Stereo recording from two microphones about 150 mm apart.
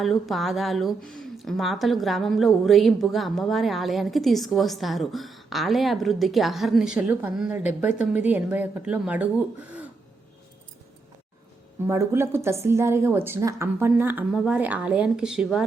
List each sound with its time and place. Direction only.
0.0 s a woman's voice: centre (ahead or behind)
11.9 s a woman's voice: 20° right (ahead or behind); by 15.6 s 5° right (ahead or behind)